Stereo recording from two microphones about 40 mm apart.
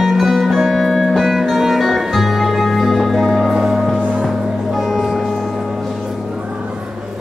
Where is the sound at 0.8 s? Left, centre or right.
Centre.